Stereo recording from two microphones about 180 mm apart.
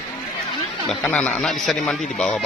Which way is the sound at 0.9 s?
5° left (ahead or behind).